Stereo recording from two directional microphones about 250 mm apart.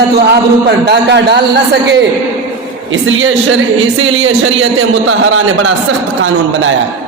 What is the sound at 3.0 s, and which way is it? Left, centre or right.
A man's voice, right.